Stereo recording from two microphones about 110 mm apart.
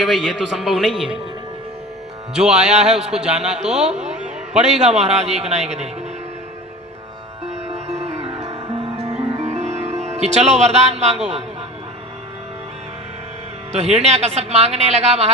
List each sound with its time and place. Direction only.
0.0 s a man's voice: 5° right (ahead or behind)
2.3 s a man's voice: 5° right (ahead or behind)
4.1 s a sound: 5° right (ahead or behind)
4.7 s speech: 80° right
7.4 s music: 75° right (ahead or behind)
9.3 s music: 90° right
13.7 s a man's voice: 75° right (ahead or behind)